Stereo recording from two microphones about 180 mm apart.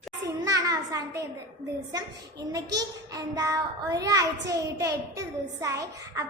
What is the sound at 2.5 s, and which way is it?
A child's voice, 20° right (ahead or behind).